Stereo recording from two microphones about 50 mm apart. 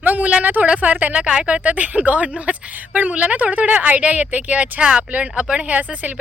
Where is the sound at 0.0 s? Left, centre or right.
Right.